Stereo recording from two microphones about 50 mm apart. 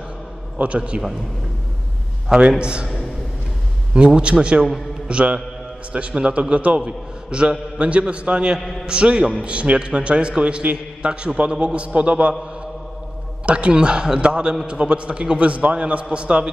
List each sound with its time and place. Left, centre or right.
0.6 s a man's voice: right
2.2 s a man's voice: centre
3.9 s a man's voice: centre
5.0 s mantra: right
5.9 s a man's voice: right
13.5 s a man's voice: right